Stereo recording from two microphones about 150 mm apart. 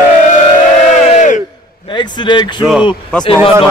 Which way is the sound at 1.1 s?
55° left (ahead or behind).